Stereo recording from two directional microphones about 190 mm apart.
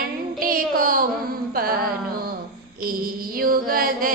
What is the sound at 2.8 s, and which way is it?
Music, 50° right (ahead or behind).